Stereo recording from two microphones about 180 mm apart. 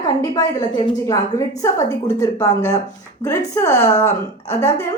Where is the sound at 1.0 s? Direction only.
15° left (ahead or behind).